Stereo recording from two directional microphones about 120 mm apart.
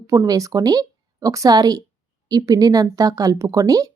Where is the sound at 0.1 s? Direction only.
30° right (ahead or behind).